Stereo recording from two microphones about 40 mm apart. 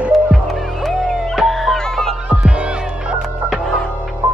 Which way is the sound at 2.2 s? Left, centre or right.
Right.